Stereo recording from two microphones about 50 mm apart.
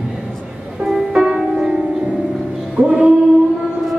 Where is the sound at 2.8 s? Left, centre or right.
Right.